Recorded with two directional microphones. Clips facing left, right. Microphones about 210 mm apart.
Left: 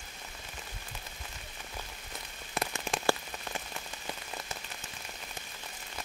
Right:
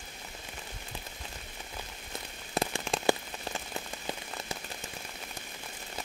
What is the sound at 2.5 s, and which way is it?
Rain on surface, 30° right (ahead or behind).